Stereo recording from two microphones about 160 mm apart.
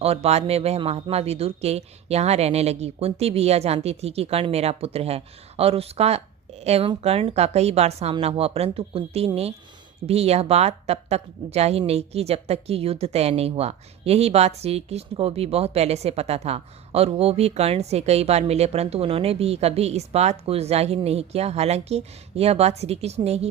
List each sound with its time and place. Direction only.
0.0 s a woman's voice: 40° right (ahead or behind)